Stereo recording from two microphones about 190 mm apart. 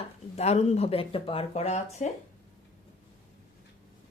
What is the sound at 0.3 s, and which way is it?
A woman's voice, 35° left (ahead or behind).